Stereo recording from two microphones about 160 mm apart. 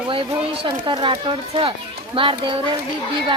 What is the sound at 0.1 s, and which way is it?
Speech, 35° right (ahead or behind).